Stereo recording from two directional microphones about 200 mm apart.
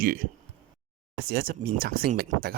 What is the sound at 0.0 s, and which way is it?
Speech, 45° right (ahead or behind).